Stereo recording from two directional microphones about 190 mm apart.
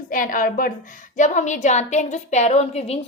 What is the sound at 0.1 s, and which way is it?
A woman's voice, 45° left (ahead or behind).